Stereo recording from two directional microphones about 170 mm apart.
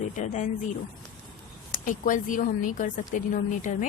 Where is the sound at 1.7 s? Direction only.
50° left (ahead or behind).